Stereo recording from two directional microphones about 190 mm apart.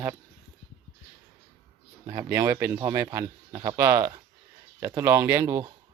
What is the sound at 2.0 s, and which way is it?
Speech, 20° right (ahead or behind).